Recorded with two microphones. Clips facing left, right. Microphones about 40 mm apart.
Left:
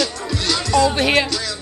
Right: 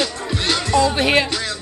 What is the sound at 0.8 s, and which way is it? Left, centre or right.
Speech, centre.